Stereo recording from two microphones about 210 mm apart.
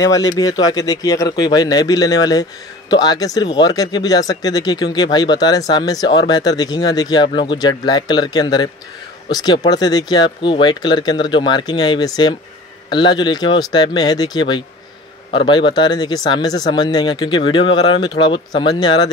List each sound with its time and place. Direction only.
0.4 s speech: 20° left (ahead or behind)